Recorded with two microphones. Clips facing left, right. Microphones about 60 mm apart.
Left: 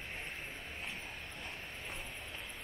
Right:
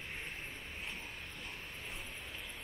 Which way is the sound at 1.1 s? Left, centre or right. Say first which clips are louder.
Left 1 dB; centre.